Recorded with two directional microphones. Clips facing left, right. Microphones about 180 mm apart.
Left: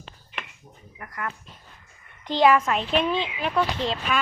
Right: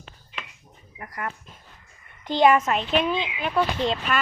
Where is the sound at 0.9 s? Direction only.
35° right (ahead or behind).